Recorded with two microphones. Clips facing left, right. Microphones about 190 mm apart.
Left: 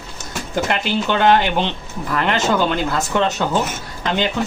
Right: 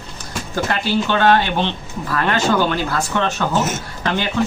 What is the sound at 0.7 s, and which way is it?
Speech, 20° left (ahead or behind).